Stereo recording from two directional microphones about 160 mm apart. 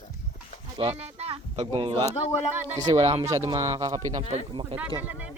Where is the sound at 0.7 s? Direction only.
35° right (ahead or behind).